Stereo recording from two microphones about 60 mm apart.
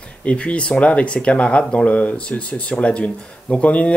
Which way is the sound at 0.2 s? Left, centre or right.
Left.